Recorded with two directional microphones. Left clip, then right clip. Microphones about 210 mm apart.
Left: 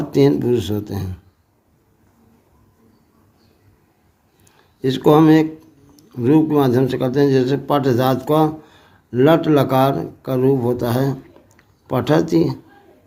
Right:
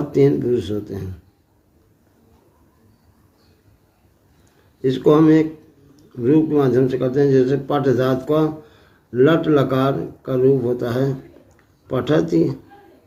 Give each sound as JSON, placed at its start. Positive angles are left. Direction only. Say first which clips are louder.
{"t": 0.1, "sound": "speech", "louder": "left 1 dB", "side_deg": 45}
{"t": 4.8, "sound": "speech", "louder": "left 1 dB", "side_deg": 50}